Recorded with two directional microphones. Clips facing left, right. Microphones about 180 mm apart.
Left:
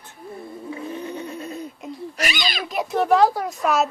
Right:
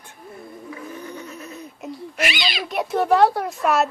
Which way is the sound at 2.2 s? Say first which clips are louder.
Right 2 dB; 45° left (ahead or behind).